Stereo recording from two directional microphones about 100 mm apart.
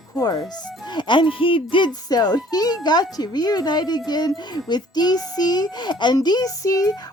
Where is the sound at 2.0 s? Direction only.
40° left (ahead or behind).